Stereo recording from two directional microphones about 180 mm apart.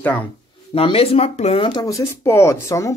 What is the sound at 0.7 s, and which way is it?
Speech, 30° left (ahead or behind).